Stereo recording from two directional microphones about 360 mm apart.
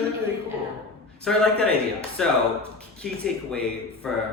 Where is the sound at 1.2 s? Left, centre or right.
Centre.